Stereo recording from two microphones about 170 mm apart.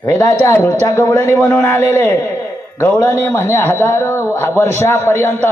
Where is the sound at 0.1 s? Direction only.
15° left (ahead or behind).